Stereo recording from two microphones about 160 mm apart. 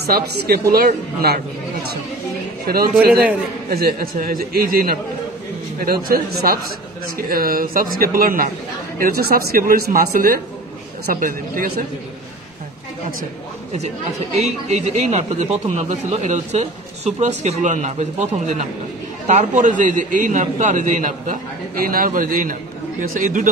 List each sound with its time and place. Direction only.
0.0 s speech: 75° right (ahead or behind)
2.6 s speech: 70° right (ahead or behind)
14.4 s a man's voice: 45° right (ahead or behind)